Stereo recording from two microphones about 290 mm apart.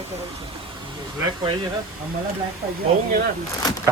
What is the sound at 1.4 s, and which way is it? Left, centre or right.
Speech, centre.